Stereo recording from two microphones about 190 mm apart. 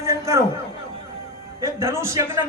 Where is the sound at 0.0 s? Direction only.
15° right (ahead or behind).